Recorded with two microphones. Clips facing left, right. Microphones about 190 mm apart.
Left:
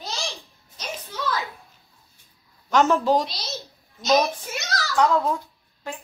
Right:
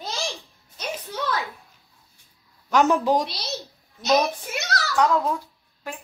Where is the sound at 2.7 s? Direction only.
15° right (ahead or behind).